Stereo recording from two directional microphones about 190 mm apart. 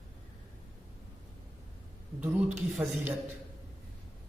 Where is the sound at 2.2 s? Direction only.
10° right (ahead or behind).